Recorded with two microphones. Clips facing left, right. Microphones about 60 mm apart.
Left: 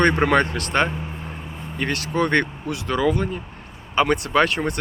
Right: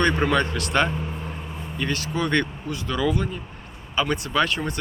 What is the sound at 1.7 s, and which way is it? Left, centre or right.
Speech, left.